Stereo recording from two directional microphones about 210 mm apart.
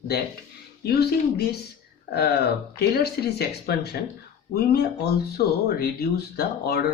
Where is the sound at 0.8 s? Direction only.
50° left (ahead or behind).